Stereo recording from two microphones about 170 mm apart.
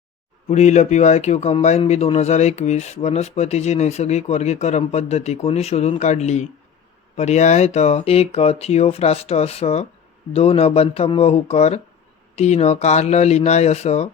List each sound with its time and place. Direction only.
0.4 s speech: 40° left (ahead or behind)